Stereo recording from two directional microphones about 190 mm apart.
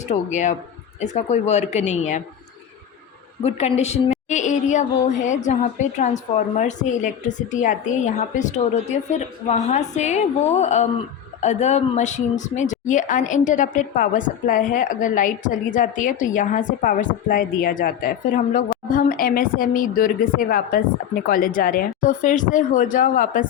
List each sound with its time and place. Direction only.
0.1 s a woman's voice: 40° left (ahead or behind)
3.4 s a woman's voice: 35° left (ahead or behind)